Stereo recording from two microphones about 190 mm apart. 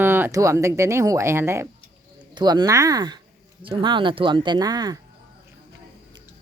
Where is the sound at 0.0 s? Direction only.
10° right (ahead or behind).